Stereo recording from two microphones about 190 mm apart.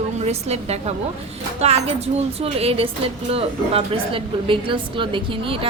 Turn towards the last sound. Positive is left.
turn(degrees=-25)  # may be behind; listen again after turning